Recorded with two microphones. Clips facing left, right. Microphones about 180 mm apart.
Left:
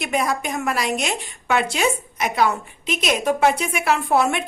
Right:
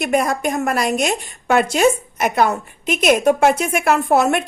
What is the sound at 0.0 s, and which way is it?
A woman's voice, 50° right (ahead or behind).